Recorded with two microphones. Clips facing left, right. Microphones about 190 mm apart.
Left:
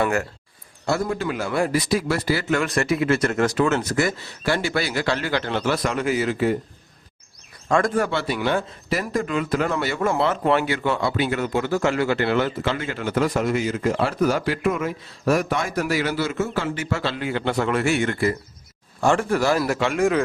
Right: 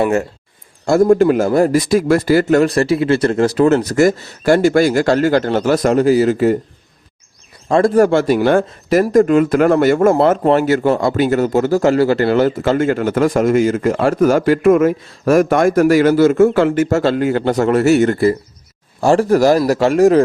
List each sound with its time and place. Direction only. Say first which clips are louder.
0.0 s a man's voice: right 7 dB; 25° right (ahead or behind)
0.9 s speech: right 13 dB; 45° right (ahead or behind)
7.7 s a man's voice: right 9 dB; 35° right (ahead or behind)